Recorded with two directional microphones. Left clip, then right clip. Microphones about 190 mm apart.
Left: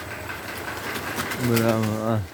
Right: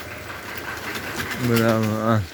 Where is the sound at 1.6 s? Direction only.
15° right (ahead or behind).